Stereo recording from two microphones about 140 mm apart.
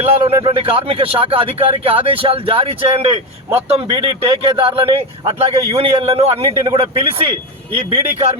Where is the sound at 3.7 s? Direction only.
40° right (ahead or behind).